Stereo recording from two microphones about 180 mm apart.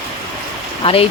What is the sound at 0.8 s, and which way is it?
Speech, 30° left (ahead or behind).